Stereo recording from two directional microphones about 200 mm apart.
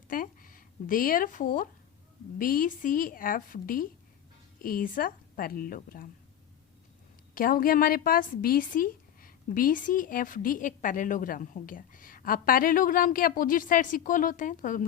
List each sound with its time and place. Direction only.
0.1 s a sound: 45° left (ahead or behind)
2.4 s a woman's voice: 45° left (ahead or behind)
7.3 s a woman's voice: 45° left (ahead or behind)